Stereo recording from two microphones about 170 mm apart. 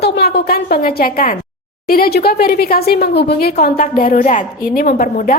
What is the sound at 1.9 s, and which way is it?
A woman's voice, 65° left (ahead or behind).